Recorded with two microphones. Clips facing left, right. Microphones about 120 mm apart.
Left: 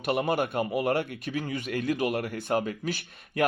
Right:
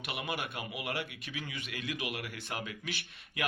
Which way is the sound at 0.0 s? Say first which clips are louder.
Left 12 dB; 45° left (ahead or behind).